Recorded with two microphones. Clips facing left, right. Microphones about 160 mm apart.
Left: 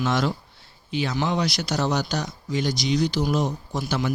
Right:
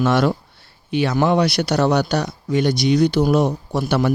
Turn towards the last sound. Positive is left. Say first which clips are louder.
# right 7 dB
turn(degrees=-60)  # may be behind; listen again after turning